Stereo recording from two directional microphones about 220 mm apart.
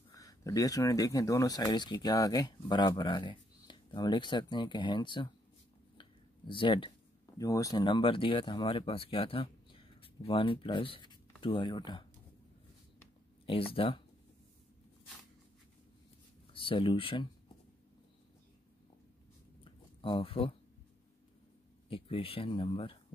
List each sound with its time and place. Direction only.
0.1 s speech: 15° left (ahead or behind)
5.9 s a sound: 20° left (ahead or behind)
7.3 s speech: 15° left (ahead or behind)
13.5 s speech: 25° left (ahead or behind)
16.5 s speech: 25° left (ahead or behind)
19.6 s a sound: 25° left (ahead or behind)
21.8 s speech: 25° left (ahead or behind)